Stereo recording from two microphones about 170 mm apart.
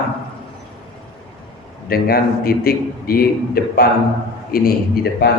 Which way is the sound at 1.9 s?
60° left (ahead or behind).